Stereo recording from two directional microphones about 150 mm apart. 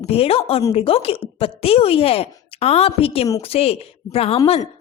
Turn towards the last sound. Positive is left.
turn(degrees=40)  # may be behind; listen again after turning